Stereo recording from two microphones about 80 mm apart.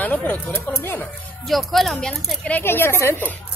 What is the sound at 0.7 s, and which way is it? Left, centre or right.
Speech, left.